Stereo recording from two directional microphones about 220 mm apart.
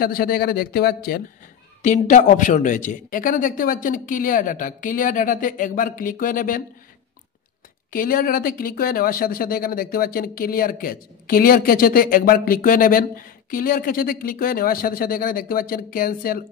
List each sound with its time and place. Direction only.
0.0 s speech: 40° left (ahead or behind)
1.8 s speech: 35° left (ahead or behind)
7.9 s speech: 40° left (ahead or behind)